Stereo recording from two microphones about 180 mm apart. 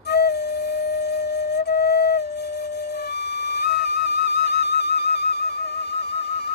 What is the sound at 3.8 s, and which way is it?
Music, 65° left (ahead or behind).